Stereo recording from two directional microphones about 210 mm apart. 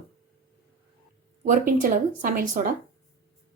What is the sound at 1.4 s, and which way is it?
Speech, 40° right (ahead or behind).